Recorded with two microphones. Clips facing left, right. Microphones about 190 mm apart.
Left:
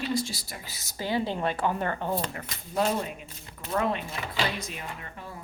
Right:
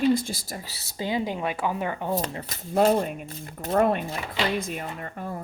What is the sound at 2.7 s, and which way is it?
Speech, 50° right (ahead or behind).